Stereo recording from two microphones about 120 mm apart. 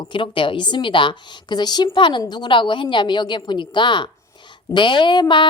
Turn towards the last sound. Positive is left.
turn(degrees=40)  # may be behind; listen again after turning